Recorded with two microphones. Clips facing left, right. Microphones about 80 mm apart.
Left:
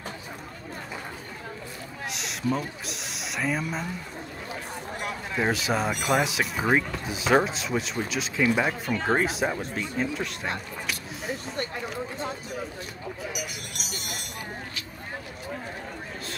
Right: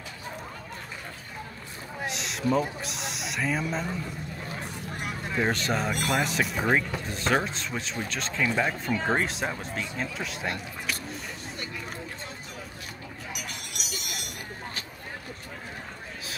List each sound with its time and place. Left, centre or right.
2.0 s a sound: centre
2.8 s speech: centre
5.0 s speech: centre
13.7 s vehicle: left